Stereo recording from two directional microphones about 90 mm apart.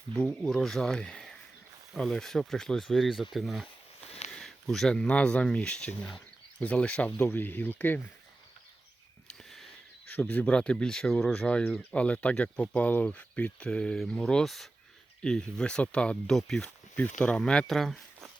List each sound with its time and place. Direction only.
0.1 s speech: 10° left (ahead or behind)
9.2 s a sound: 5° left (ahead or behind)
10.1 s speech: 20° left (ahead or behind); by 18.3 s centre (ahead or behind)